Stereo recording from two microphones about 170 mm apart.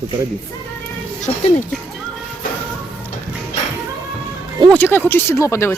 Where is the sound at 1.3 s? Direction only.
35° left (ahead or behind).